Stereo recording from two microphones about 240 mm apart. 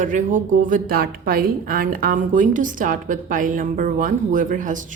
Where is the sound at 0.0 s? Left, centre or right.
Right.